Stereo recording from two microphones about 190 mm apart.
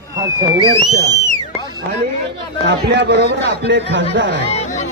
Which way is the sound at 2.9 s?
65° right (ahead or behind).